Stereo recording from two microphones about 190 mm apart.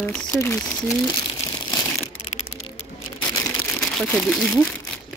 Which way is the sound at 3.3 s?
5° left (ahead or behind).